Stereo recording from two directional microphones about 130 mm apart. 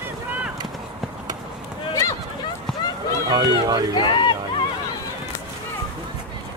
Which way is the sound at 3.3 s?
30° right (ahead or behind).